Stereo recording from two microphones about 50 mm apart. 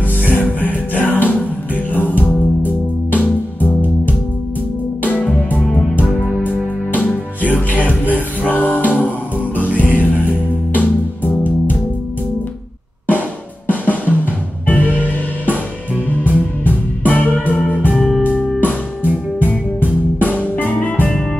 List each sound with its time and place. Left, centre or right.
0.3 s music: left
6.4 s music: left
13.7 s drum: left
16.3 s music: left
17.9 s music: centre
19.4 s music: left